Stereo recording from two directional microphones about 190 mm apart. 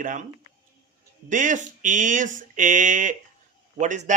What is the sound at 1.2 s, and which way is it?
A man's voice, 45° right (ahead or behind).